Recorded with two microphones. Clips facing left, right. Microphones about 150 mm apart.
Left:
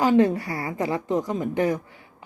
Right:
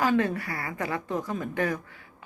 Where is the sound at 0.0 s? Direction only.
25° left (ahead or behind).